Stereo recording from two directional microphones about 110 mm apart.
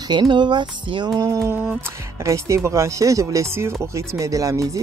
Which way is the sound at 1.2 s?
35° right (ahead or behind).